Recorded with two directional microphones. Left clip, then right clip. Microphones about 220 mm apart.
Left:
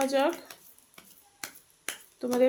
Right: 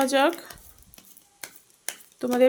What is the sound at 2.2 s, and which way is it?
Speech, 30° right (ahead or behind).